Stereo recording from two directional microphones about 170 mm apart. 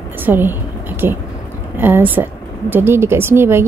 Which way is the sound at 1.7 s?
10° right (ahead or behind).